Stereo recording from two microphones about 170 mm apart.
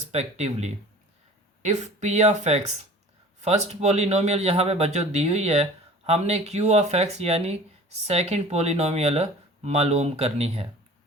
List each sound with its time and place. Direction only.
0.1 s speech: 40° right (ahead or behind)